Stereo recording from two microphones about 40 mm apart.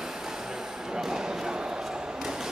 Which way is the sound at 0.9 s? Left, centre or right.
Centre.